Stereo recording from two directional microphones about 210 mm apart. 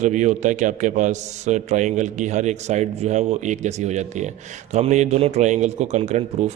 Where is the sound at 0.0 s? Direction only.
35° right (ahead or behind).